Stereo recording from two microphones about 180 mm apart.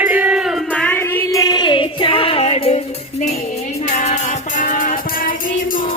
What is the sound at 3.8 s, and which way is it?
Music, 45° left (ahead or behind).